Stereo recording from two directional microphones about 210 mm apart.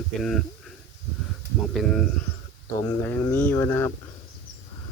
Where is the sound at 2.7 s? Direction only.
15° left (ahead or behind).